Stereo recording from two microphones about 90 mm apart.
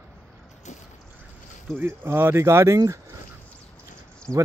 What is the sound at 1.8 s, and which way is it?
Speech, 25° right (ahead or behind).